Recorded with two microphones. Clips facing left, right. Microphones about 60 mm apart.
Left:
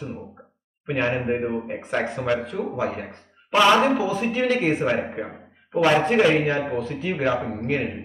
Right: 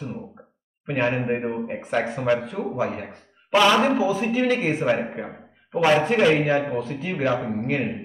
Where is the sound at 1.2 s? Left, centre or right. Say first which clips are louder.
Left 1 dB; centre.